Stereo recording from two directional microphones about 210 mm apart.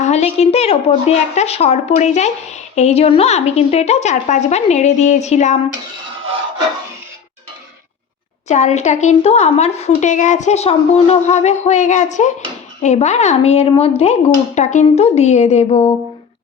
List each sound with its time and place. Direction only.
0.0 s a woman's voice: 30° left (ahead or behind)
8.4 s a woman's voice: 35° left (ahead or behind)